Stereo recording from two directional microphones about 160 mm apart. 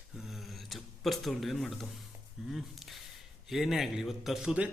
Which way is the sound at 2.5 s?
Centre (ahead or behind).